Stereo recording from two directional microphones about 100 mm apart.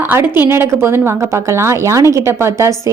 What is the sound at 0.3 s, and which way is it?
A woman's voice, 25° right (ahead or behind).